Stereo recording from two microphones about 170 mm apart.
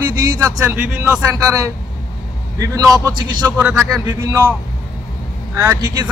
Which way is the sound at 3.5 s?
10° right (ahead or behind).